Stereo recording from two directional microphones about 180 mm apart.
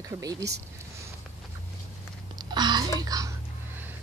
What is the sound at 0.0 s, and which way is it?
Speech, 20° right (ahead or behind).